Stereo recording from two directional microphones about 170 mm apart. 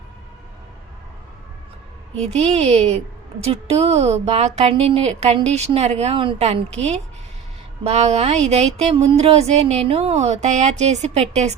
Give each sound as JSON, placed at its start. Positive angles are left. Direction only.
{"t": 2.1, "sound": "speech", "side_deg": -40}